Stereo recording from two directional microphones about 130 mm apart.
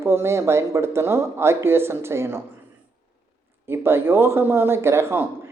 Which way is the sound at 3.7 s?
20° right (ahead or behind).